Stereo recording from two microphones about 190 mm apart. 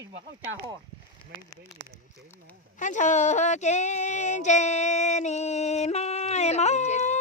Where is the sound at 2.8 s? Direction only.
40° left (ahead or behind).